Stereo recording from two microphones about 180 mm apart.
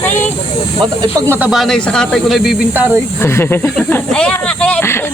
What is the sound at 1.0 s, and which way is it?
Speech, 20° right (ahead or behind).